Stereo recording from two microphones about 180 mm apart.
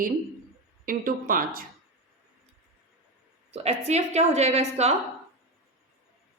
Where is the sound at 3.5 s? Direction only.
35° right (ahead or behind).